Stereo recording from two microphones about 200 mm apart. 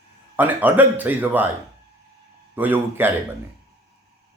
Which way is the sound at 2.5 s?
10° right (ahead or behind).